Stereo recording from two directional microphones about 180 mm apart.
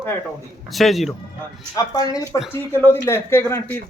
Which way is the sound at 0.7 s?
Centre (ahead or behind).